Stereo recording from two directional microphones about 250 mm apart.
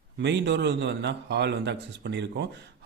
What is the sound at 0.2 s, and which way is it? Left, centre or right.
Speech, right.